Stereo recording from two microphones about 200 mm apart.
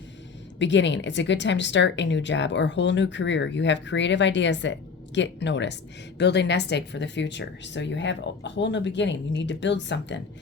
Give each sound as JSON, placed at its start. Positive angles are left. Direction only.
{"t": 0.6, "sound": "a woman's voice", "side_deg": 65}